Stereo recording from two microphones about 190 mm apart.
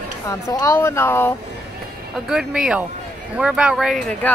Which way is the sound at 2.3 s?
5° right (ahead or behind).